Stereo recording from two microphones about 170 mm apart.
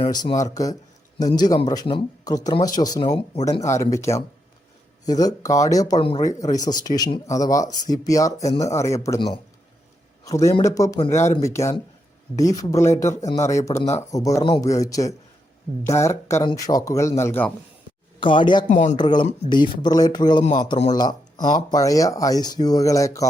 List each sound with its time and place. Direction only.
0.1 s speech: 25° left (ahead or behind)
3.4 s speech: 20° left (ahead or behind)
6.0 s speech: 30° left (ahead or behind)
6.2 s speech: 20° left (ahead or behind)
10.2 s speech: 20° left (ahead or behind)
18.2 s speech: 30° left (ahead or behind)
18.7 s speech: 45° left (ahead or behind)
18.9 s speech: 25° left (ahead or behind)